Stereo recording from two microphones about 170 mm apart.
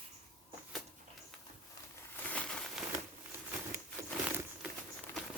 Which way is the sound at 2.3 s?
5° left (ahead or behind).